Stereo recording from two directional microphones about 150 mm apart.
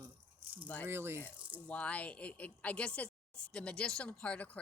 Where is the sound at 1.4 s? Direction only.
10° right (ahead or behind).